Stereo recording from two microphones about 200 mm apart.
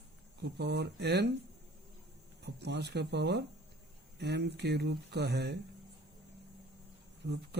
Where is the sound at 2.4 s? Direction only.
55° right (ahead or behind).